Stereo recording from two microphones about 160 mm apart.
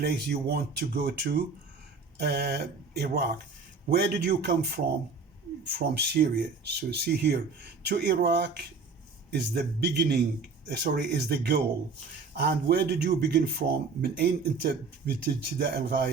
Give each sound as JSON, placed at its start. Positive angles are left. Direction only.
{"t": 0.0, "sound": "a man's voice", "side_deg": -85}
{"t": 6.9, "sound": "speech", "side_deg": -90}